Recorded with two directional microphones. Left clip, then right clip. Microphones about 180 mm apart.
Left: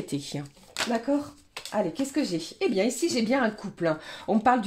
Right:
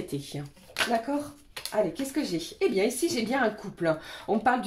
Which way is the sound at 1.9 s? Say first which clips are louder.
Left 2 dB; 40° left (ahead or behind).